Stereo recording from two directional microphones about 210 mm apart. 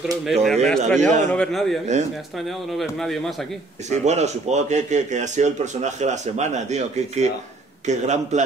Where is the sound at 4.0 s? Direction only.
30° right (ahead or behind).